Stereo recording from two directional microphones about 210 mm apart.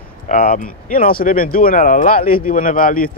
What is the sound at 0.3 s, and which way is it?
Speech, 40° left (ahead or behind).